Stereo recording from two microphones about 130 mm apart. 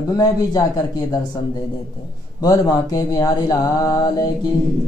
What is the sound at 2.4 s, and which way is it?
Speech, 30° left (ahead or behind).